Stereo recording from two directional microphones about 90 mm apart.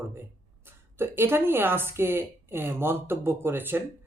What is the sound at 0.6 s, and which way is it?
Speech, 25° right (ahead or behind).